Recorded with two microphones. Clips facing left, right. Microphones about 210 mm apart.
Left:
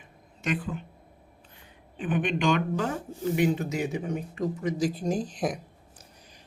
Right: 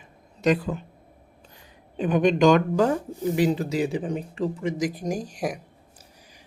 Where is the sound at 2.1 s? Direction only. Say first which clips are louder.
Right 8 dB; 40° right (ahead or behind); by 5.6 s 10° right (ahead or behind).